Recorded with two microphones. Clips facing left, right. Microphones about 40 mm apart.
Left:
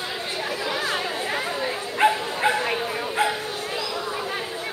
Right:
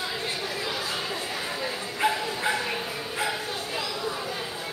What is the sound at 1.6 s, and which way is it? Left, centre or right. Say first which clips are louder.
Bow-wow: left 6 dB; left.